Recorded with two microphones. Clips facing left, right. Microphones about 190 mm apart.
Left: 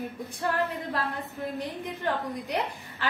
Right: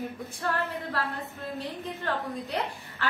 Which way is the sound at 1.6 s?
15° left (ahead or behind).